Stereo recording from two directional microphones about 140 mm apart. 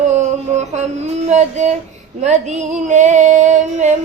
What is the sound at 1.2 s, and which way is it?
Female singing, 55° right (ahead or behind).